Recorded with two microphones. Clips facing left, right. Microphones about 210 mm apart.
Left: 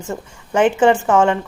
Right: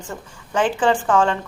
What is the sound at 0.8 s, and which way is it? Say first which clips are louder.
Speech: left 3 dB; 25° left (ahead or behind).